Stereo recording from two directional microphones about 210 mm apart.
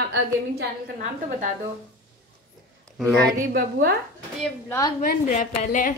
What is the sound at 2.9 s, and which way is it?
Speech, 5° left (ahead or behind).